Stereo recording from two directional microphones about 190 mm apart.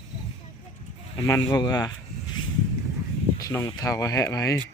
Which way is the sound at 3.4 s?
15° left (ahead or behind).